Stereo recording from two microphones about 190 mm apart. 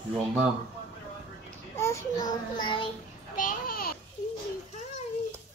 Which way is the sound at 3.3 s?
50° left (ahead or behind).